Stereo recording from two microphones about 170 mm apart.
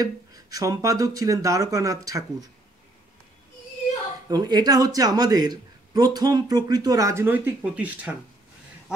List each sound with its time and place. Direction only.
0.6 s a man's voice: 20° right (ahead or behind)
4.3 s a man's voice: 25° right (ahead or behind)